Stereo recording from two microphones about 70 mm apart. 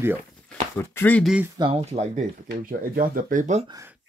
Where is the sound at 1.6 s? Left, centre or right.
Right.